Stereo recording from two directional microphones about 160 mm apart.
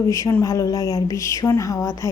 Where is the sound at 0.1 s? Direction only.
20° left (ahead or behind).